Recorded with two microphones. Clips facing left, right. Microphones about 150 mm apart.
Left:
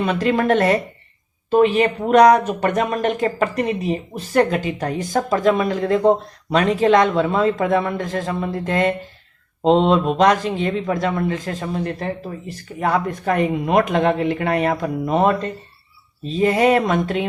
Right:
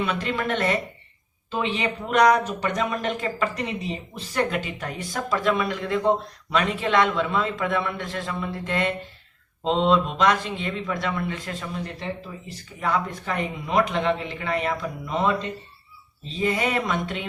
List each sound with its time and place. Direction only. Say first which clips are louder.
0.0 s speech: left 8 dB; 45° left (ahead or behind)